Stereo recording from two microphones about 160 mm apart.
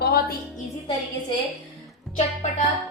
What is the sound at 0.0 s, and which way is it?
Music, 75° left (ahead or behind).